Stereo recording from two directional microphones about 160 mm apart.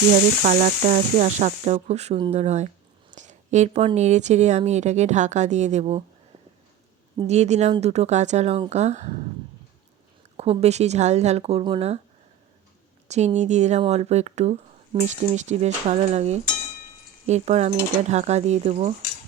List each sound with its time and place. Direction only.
0.4 s a woman's voice: 50° right (ahead or behind)
7.3 s a woman's voice: 45° right (ahead or behind)
10.3 s speech: 40° right (ahead or behind)
13.1 s a woman's voice: 45° right (ahead or behind)
15.4 s a woman's voice: 45° right (ahead or behind)